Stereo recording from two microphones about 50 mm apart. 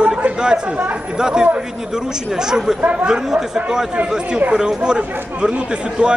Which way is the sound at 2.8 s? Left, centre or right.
Right.